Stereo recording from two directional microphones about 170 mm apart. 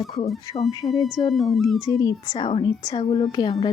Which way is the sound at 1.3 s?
Centre (ahead or behind).